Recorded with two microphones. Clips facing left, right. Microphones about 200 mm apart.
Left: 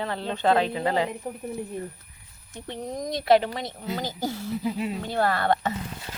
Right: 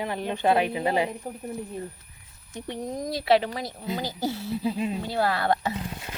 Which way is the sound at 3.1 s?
5° right (ahead or behind).